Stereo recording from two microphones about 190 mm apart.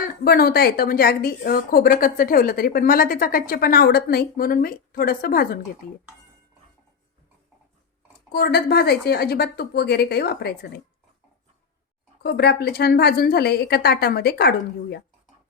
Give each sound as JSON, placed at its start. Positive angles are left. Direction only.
{"t": 0.3, "sound": "a woman's voice", "side_deg": 55}
{"t": 8.3, "sound": "a woman's voice", "side_deg": 55}
{"t": 12.2, "sound": "a woman's voice", "side_deg": 60}